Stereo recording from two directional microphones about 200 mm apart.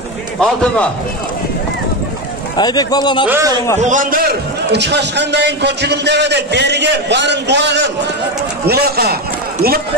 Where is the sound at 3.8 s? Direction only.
40° right (ahead or behind).